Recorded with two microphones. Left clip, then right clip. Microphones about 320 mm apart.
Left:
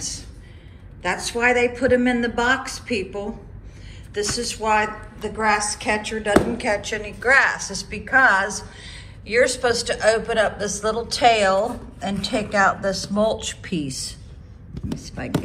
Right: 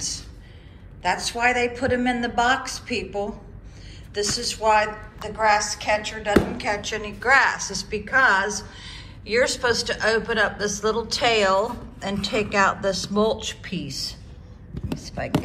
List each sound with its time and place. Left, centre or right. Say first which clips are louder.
1.0 s a man's voice: left 1 dB; centre